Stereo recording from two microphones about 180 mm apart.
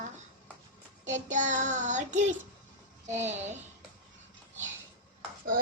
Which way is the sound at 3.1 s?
40° right (ahead or behind).